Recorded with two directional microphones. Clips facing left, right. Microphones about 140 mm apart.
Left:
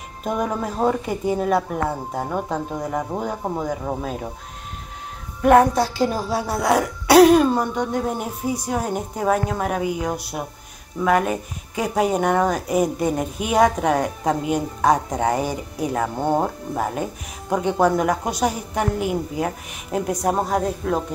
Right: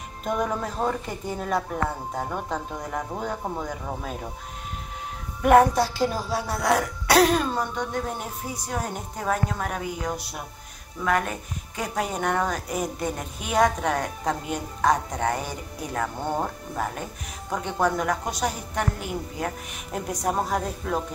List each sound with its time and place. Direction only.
0.2 s speech: 5° left (ahead or behind)
5.4 s music: 5° right (ahead or behind)
6.6 s speech: 5° left (ahead or behind)
16.2 s speech: 30° left (ahead or behind)
16.7 s speech: 15° left (ahead or behind)
20.9 s music: 5° left (ahead or behind)